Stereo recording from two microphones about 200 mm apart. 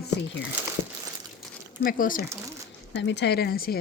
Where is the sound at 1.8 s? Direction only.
45° left (ahead or behind).